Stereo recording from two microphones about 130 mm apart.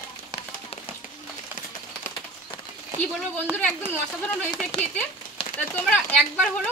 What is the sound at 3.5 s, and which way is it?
Speech, 15° left (ahead or behind).